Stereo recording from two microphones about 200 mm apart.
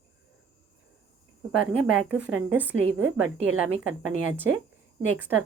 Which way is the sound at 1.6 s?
90° right.